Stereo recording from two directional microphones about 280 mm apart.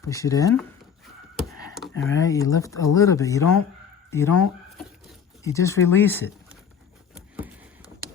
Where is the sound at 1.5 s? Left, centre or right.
Right.